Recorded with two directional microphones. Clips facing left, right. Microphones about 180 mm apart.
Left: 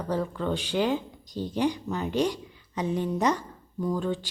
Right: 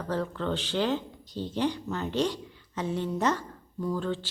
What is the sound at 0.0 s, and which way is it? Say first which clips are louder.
Speech: left 2 dB; 10° left (ahead or behind).